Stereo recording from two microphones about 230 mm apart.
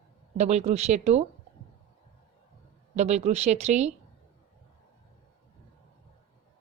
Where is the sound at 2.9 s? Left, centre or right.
Right.